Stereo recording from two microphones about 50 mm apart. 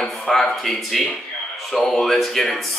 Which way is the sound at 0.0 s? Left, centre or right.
Centre.